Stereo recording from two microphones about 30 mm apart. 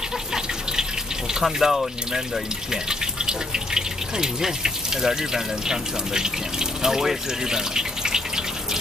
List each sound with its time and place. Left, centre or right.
1.4 s speech: centre
2.7 s speech: right